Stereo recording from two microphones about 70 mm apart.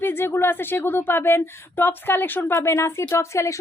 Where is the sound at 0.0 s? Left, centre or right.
Left.